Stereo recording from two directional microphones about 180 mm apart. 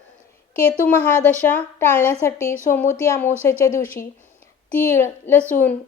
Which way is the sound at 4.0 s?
55° left (ahead or behind).